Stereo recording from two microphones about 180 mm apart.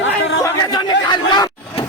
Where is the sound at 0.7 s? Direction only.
20° left (ahead or behind).